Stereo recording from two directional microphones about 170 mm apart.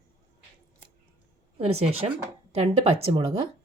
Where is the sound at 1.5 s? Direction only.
35° right (ahead or behind).